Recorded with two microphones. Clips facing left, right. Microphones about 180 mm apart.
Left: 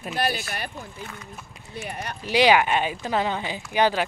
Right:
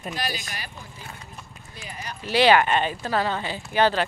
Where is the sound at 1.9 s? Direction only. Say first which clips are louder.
Left 3 dB; 65° left (ahead or behind).